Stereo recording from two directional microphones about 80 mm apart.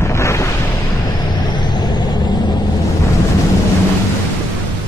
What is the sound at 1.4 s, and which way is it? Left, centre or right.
Vehicle, left.